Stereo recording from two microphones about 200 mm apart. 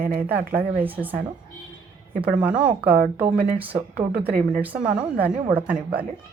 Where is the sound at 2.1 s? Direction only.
5° right (ahead or behind).